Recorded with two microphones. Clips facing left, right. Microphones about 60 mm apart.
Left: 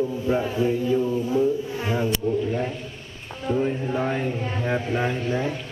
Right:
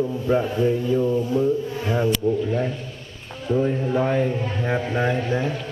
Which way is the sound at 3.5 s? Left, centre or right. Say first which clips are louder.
Right 2 dB; left.